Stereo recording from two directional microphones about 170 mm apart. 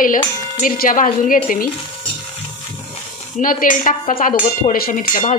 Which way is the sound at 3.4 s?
55° left (ahead or behind).